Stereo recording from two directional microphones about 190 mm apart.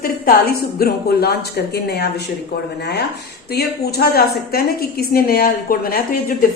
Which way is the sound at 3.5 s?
55° left (ahead or behind).